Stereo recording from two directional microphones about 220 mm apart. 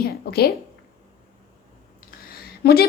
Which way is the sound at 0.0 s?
45° left (ahead or behind).